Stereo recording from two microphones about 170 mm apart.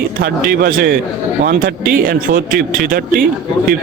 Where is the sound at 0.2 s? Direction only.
60° right (ahead or behind).